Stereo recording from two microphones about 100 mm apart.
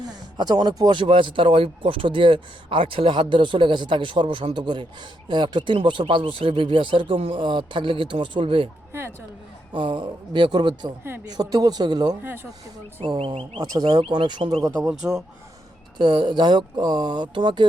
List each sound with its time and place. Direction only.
0.0 s speech: 45° right (ahead or behind); by 8.7 s 60° right (ahead or behind)
8.9 s speech: 25° right (ahead or behind)
9.7 s a man's voice: 50° right (ahead or behind)
12.2 s speech: 20° right (ahead or behind)
13.1 s speech: 70° right (ahead or behind)
13.6 s speech: 40° right (ahead or behind)
14.8 s speech: 5° right (ahead or behind)
16.0 s speech: 50° right (ahead or behind)